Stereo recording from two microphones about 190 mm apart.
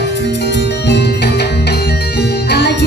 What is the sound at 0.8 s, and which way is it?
Music, 60° left (ahead or behind).